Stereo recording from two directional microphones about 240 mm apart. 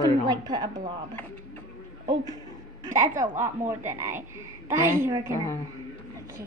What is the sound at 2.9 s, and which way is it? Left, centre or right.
A woman's voice, centre.